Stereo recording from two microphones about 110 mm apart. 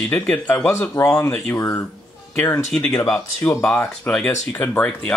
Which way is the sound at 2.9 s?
25° left (ahead or behind).